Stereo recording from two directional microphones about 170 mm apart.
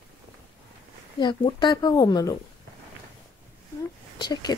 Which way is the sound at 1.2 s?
25° left (ahead or behind).